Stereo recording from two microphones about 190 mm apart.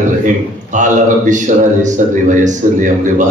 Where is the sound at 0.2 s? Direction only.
40° right (ahead or behind).